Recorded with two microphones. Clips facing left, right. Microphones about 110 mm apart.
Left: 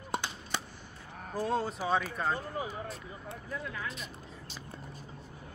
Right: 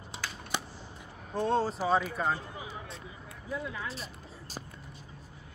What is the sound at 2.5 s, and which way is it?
Speech, 45° left (ahead or behind).